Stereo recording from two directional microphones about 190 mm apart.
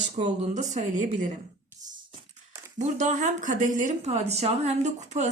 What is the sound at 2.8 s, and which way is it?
Speech, 40° right (ahead or behind).